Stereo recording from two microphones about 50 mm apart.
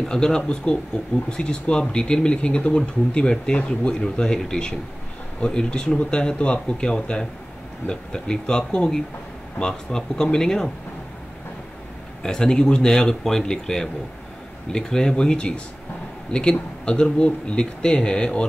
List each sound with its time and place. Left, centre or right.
0.0 s speech: centre
12.2 s speech: centre